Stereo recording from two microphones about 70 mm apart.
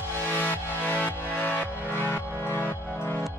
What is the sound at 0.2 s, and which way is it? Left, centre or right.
Music, left.